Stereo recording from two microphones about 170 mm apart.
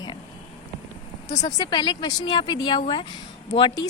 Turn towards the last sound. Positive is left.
turn(degrees=25)  # may be behind; listen again after turning